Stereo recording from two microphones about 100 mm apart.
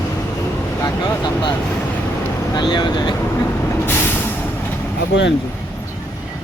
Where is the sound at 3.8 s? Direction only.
25° left (ahead or behind).